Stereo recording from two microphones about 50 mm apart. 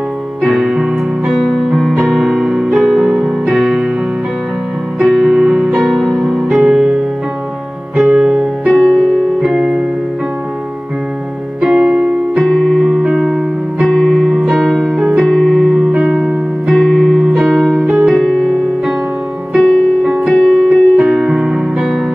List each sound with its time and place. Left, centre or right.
0.4 s music: centre
3.0 s music: centre
4.9 s music: centre
8.1 s music: centre
8.6 s music: centre
9.6 s music: right
11.6 s music: centre
12.4 s keyboard: centre
14.5 s music: centre
15.1 s keyboard: centre
17.4 s music: centre